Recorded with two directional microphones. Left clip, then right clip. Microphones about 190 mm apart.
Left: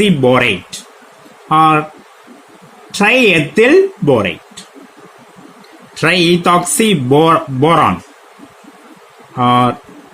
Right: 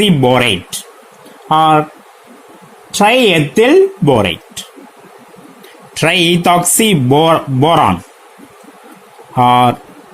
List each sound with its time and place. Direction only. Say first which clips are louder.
0.0 s speech: even; 30° right (ahead or behind)
3.0 s speech: right 1 dB; 25° right (ahead or behind)
6.0 s speech: even; 35° right (ahead or behind)
9.3 s speech: right 3 dB; 40° right (ahead or behind)